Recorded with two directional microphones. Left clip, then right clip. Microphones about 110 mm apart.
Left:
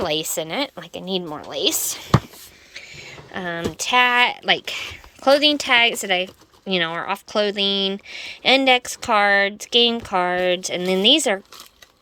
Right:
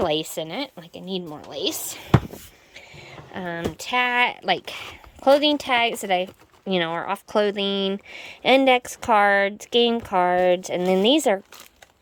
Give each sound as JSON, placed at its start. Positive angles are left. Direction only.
{"t": 0.0, "sound": "a woman's voice", "side_deg": -25}
{"t": 2.7, "sound": "a sound", "side_deg": -25}
{"t": 3.3, "sound": "a woman's voice", "side_deg": -15}